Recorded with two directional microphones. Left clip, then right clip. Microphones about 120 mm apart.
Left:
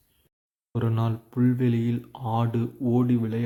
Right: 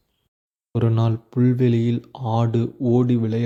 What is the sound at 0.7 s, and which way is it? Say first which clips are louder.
Speech: right 6 dB; 45° right (ahead or behind).